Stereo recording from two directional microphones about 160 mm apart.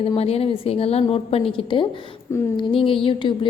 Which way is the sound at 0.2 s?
40° left (ahead or behind).